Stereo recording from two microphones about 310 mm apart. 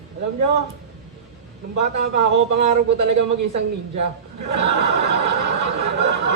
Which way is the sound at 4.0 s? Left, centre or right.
Right.